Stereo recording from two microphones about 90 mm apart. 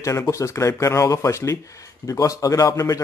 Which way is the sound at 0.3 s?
35° left (ahead or behind).